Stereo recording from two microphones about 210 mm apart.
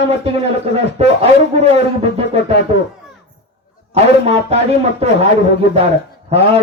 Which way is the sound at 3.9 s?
30° right (ahead or behind).